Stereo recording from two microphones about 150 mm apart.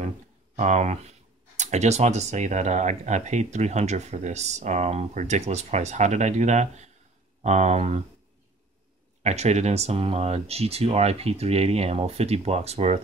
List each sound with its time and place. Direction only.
0.6 s speech: 50° right (ahead or behind)
9.2 s speech: 50° right (ahead or behind)